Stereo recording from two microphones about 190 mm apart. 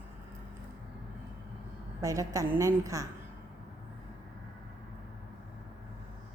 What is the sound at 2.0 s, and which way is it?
A woman's voice, 15° right (ahead or behind).